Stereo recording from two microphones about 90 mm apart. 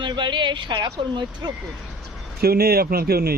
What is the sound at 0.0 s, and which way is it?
Speech, 60° right (ahead or behind).